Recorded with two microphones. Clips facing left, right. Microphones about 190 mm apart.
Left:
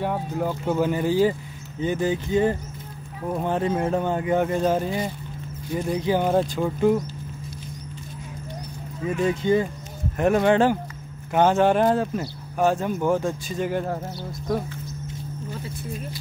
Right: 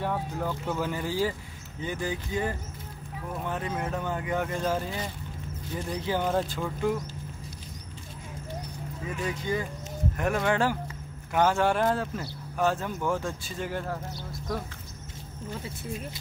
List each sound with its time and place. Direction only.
0.0 s speech: 15° left (ahead or behind)
9.0 s speech: 25° left (ahead or behind)